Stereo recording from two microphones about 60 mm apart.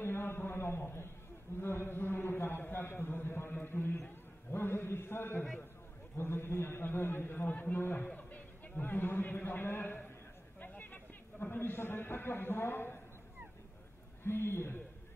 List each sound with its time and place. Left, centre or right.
0.0 s a sound: left
1.6 s a man's voice: left
14.2 s a man's voice: left